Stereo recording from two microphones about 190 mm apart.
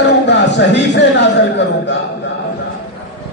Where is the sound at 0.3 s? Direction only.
65° left (ahead or behind).